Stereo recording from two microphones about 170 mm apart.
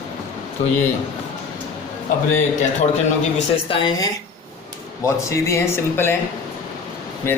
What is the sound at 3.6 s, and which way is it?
Speech, 25° left (ahead or behind).